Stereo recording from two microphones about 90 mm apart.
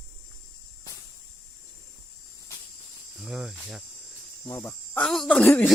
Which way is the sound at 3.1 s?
5° right (ahead or behind).